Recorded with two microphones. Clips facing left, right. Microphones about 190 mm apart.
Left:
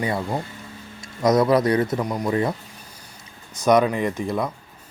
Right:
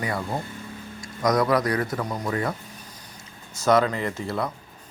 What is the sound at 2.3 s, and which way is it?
Speech, 25° left (ahead or behind).